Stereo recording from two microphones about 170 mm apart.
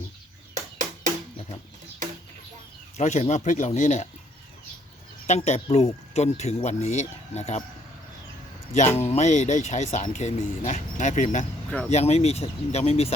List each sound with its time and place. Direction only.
0.5 s music: 45° right (ahead or behind)
3.0 s speech: 45° left (ahead or behind)
5.2 s speech: 40° left (ahead or behind)
9.0 s speech: 40° left (ahead or behind)